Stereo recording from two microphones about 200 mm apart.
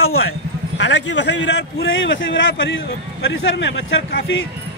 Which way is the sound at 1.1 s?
70° left (ahead or behind).